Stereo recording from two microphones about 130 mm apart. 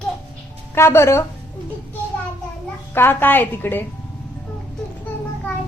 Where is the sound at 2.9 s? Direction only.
15° left (ahead or behind).